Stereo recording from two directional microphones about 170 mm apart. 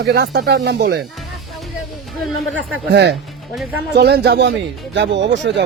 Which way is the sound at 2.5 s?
80° right.